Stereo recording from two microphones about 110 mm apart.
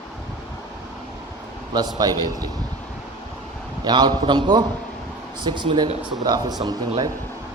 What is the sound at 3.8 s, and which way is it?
A man's voice, 40° right (ahead or behind).